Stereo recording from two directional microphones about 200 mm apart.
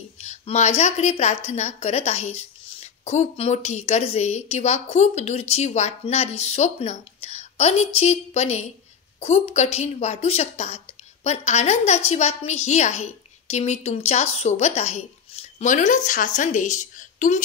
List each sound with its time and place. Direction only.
0.2 s a woman's voice: 35° left (ahead or behind)